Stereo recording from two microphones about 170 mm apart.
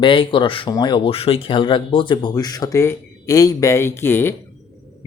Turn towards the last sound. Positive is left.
turn(degrees=15)  # may be behind; listen again after turning